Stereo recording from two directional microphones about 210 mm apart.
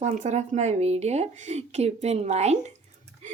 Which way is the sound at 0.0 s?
35° right (ahead or behind).